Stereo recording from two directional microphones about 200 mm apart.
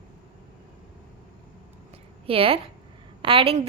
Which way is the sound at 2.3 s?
30° right (ahead or behind).